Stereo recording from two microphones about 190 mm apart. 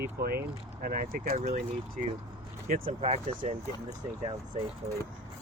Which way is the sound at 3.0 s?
35° right (ahead or behind).